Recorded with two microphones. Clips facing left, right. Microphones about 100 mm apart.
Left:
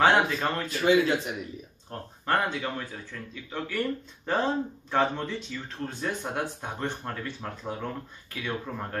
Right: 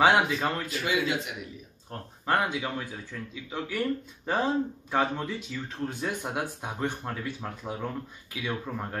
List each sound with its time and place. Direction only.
0.0 s speech: 10° right (ahead or behind)
0.7 s speech: 35° left (ahead or behind)
1.9 s speech: 10° right (ahead or behind)